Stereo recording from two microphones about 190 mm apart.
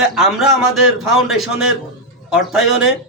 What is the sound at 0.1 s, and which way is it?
A man's voice, centre (ahead or behind).